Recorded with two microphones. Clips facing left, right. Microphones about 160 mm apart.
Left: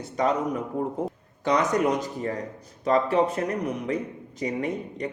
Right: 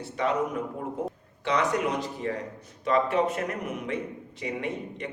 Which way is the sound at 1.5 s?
40° left (ahead or behind).